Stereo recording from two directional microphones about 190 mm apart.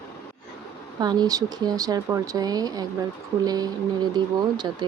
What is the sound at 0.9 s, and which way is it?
Speech, 20° right (ahead or behind).